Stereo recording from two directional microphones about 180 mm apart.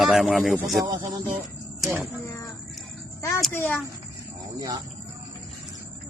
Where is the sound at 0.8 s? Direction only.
20° right (ahead or behind).